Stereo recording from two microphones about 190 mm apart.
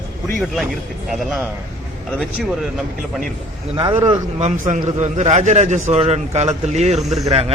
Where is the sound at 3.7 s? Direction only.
20° right (ahead or behind).